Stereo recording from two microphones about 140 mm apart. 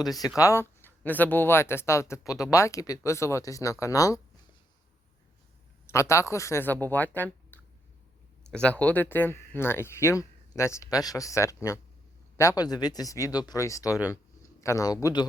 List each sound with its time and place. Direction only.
0.3 s speech: 20° left (ahead or behind)
5.8 s speech: 20° left (ahead or behind)